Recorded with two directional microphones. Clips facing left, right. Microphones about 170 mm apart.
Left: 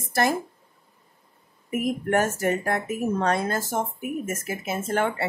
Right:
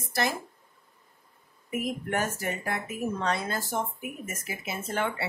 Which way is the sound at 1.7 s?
50° left (ahead or behind).